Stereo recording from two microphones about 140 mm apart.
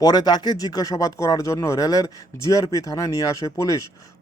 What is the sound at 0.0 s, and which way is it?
A man's voice, 30° left (ahead or behind).